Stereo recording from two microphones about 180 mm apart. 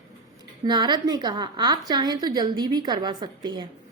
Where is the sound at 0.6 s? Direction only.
25° right (ahead or behind).